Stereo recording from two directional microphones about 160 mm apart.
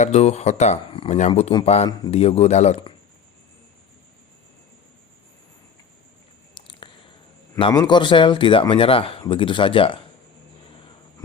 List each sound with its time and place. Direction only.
0.0 s speech: 45° left (ahead or behind)
6.6 s biting: 30° left (ahead or behind)
7.7 s speech: 25° left (ahead or behind)